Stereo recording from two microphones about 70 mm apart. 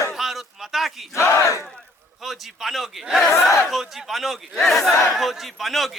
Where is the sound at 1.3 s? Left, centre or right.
Left.